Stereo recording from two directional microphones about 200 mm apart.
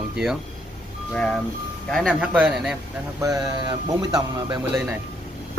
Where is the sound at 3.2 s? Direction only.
15° right (ahead or behind).